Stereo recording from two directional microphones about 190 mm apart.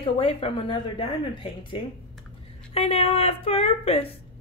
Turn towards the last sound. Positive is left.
turn(degrees=30)  # may be behind; listen again after turning